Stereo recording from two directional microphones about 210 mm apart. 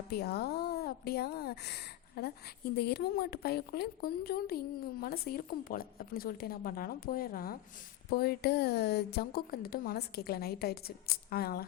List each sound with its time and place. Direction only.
0.1 s speech: 50° left (ahead or behind)